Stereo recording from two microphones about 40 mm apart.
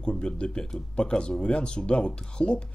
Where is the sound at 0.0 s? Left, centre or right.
Left.